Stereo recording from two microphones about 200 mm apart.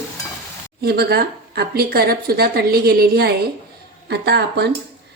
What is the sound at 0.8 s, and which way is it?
Speech, 50° right (ahead or behind).